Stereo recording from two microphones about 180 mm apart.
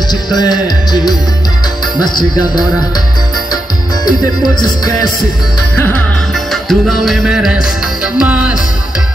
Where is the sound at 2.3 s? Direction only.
20° left (ahead or behind).